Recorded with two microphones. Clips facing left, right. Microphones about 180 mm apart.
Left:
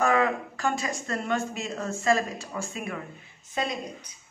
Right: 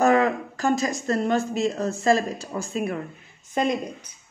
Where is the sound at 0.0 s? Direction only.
40° right (ahead or behind).